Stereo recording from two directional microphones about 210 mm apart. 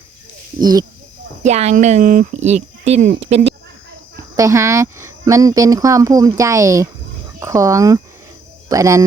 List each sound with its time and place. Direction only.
0.6 s speech: 20° right (ahead or behind)
1.4 s speech: 30° right (ahead or behind)
4.4 s speech: 15° right (ahead or behind)